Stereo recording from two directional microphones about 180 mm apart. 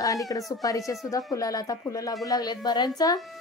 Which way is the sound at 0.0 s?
20° left (ahead or behind).